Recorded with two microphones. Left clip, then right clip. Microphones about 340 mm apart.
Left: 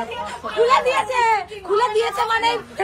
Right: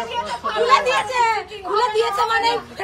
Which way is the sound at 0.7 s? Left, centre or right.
Left.